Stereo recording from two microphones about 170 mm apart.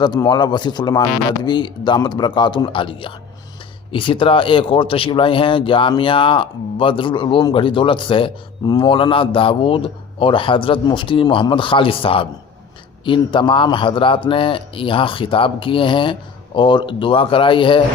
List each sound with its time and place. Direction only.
0.0 s speech: 25° left (ahead or behind)